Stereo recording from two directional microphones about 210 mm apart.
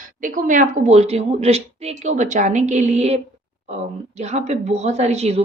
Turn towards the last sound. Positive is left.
turn(degrees=-30)  # may be behind; listen again after turning